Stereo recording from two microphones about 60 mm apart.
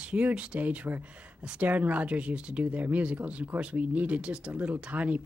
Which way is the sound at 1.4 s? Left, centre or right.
Centre.